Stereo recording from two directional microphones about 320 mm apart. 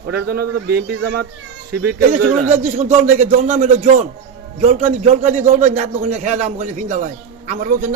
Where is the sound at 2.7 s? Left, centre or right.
Right.